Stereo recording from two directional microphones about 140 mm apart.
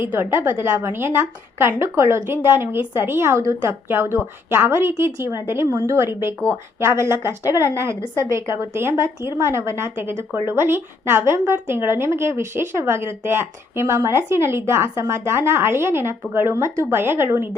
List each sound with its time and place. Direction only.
0.0 s a woman's voice: 15° right (ahead or behind)